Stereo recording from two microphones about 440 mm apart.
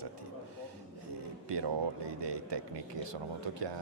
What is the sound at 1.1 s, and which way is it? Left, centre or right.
Speech, right.